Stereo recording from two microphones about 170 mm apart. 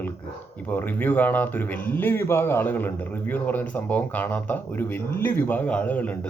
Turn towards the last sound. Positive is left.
turn(degrees=10)  # may be behind; listen again after turning